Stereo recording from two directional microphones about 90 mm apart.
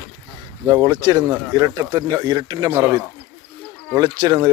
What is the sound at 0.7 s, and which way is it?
Speech, 50° right (ahead or behind).